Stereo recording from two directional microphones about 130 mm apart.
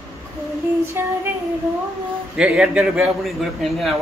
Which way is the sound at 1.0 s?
20° right (ahead or behind).